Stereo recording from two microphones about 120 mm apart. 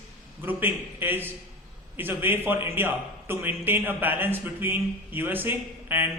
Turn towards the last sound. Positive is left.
turn(degrees=-15)  # may be behind; listen again after turning